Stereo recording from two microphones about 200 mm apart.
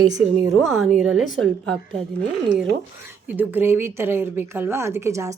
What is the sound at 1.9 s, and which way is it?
Speech, 30° right (ahead or behind).